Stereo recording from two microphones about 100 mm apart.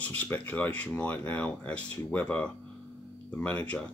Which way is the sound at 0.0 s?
15° left (ahead or behind).